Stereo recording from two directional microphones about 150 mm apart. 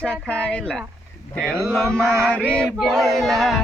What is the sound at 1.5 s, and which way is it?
Speech, 15° right (ahead or behind).